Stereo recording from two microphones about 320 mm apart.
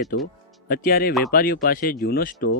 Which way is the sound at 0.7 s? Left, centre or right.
Left.